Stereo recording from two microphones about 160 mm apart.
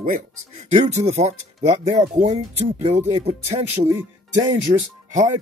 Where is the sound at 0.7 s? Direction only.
45° right (ahead or behind).